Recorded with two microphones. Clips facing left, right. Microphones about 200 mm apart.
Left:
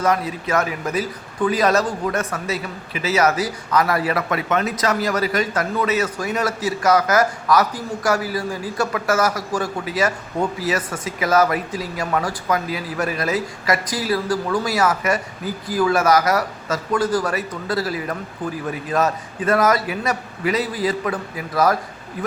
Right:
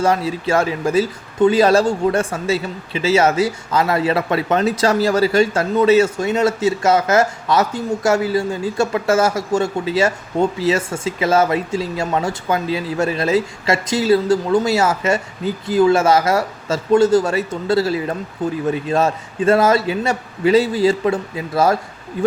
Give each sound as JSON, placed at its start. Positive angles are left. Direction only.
{"t": 0.0, "sound": "a man's voice", "side_deg": -30}